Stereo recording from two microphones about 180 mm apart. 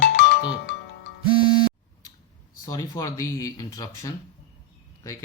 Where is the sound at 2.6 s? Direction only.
20° left (ahead or behind).